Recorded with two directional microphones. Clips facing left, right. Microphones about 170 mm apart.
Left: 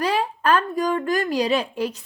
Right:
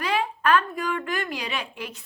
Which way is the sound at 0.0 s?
35° left (ahead or behind).